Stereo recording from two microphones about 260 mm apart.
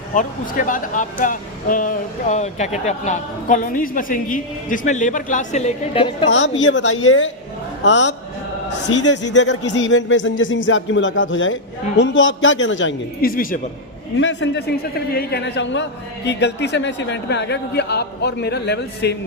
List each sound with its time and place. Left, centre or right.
0.1 s speech: left
6.2 s speech: left
14.2 s a man's voice: left